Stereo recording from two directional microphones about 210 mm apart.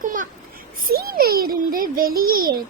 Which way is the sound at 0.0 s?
40° right (ahead or behind).